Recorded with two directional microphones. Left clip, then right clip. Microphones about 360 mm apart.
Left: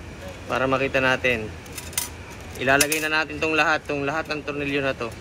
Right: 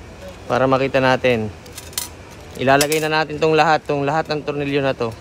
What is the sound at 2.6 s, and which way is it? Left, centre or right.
Speech, right.